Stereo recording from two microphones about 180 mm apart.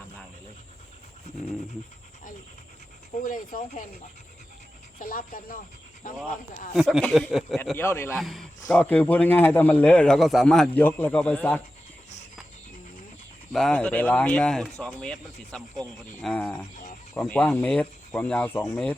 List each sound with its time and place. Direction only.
3.2 s speech: 50° left (ahead or behind)
4.9 s speech: 50° left (ahead or behind)
6.7 s speech: centre (ahead or behind)
7.6 s a man's voice: 10° left (ahead or behind)
8.2 s a man's voice: centre (ahead or behind)
13.5 s a man's voice: 5° left (ahead or behind)